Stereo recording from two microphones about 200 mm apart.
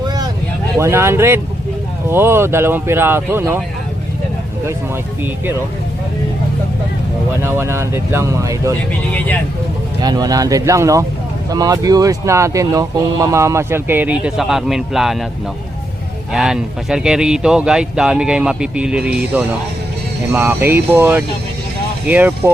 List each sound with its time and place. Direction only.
0.8 s speech: 15° right (ahead or behind)
7.4 s speech: 15° right (ahead or behind)
9.1 s speech: 5° left (ahead or behind)
10.0 s speech: 20° right (ahead or behind); by 15.2 s centre (ahead or behind)
16.3 s speech: 5° right (ahead or behind)
20.3 s speech: 10° right (ahead or behind)